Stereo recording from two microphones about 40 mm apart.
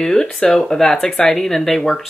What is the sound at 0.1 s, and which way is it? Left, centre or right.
Speech, centre.